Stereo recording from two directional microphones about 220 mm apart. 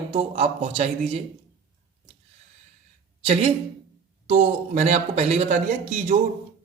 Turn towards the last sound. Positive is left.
turn(degrees=-35)  # may be behind; listen again after turning